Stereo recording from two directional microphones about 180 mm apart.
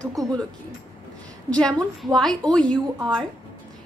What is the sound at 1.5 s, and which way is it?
A woman's voice, 5° left (ahead or behind).